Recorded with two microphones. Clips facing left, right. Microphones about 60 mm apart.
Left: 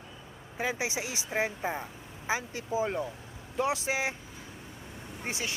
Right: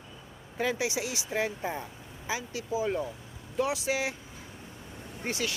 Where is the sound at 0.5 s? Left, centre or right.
Centre.